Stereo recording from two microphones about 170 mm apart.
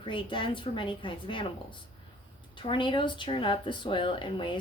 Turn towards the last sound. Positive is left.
turn(degrees=30)  # may be behind; listen again after turning